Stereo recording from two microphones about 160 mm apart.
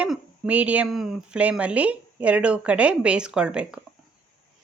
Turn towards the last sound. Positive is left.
turn(degrees=-5)  # may be behind; listen again after turning